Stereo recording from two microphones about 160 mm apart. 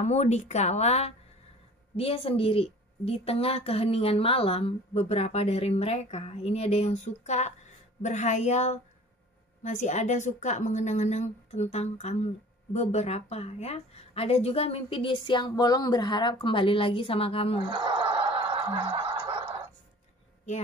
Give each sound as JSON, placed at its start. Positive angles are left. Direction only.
{"t": 0.0, "sound": "a woman's voice", "side_deg": 45}
{"t": 17.6, "sound": "snicker", "side_deg": -30}